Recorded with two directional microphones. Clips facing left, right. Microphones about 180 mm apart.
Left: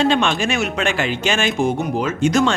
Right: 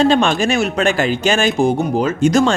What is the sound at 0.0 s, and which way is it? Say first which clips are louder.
Speech: right 4 dB; 40° right (ahead or behind).